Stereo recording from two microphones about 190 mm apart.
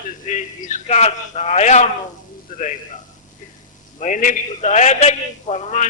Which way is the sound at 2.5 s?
50° left (ahead or behind).